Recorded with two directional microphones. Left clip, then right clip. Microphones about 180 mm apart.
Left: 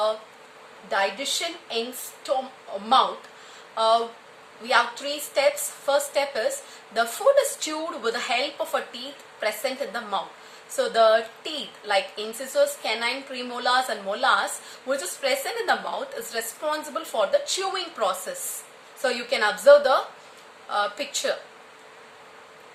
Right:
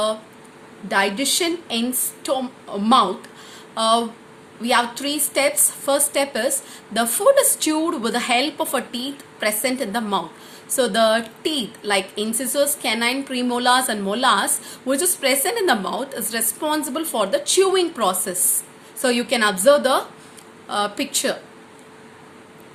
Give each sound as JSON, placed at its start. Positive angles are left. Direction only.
{"t": 0.9, "sound": "a woman's voice", "side_deg": -30}
{"t": 3.8, "sound": "a woman's voice", "side_deg": -30}